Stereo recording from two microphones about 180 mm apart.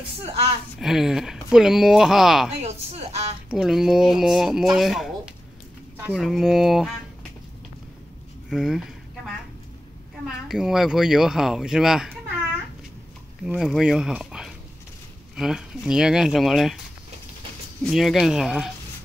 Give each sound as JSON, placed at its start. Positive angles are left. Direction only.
{"t": 0.7, "sound": "speech", "side_deg": 0}
{"t": 2.6, "sound": "speech", "side_deg": -35}
{"t": 3.4, "sound": "speech", "side_deg": -5}
{"t": 8.5, "sound": "speech", "side_deg": -5}
{"t": 10.2, "sound": "speech", "side_deg": 0}
{"t": 13.4, "sound": "speech", "side_deg": -5}
{"t": 17.8, "sound": "speech", "side_deg": 0}